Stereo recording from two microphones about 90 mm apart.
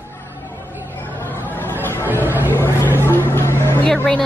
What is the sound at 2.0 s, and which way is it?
Chatter, 20° right (ahead or behind).